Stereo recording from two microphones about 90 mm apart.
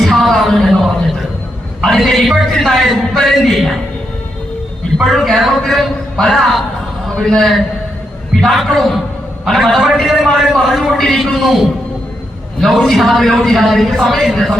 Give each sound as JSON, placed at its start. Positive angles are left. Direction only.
{"t": 0.0, "sound": "a sound", "side_deg": 5}
{"t": 1.8, "sound": "a man's voice", "side_deg": 5}
{"t": 4.9, "sound": "a man's voice", "side_deg": 0}